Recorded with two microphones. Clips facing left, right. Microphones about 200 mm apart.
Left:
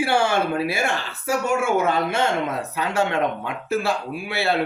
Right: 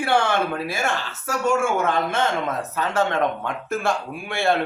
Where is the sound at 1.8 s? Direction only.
10° left (ahead or behind).